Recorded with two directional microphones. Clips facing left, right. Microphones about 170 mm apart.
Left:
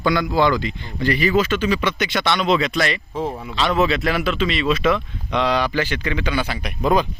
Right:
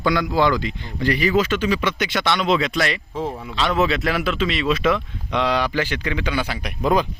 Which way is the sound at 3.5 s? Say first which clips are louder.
Left 1 dB; centre (ahead or behind).